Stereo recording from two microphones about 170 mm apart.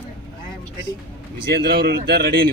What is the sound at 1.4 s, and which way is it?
Speech, 75° right (ahead or behind).